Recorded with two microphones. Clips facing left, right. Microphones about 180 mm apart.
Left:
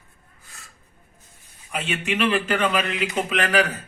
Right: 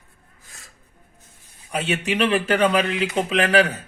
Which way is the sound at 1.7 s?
35° right (ahead or behind).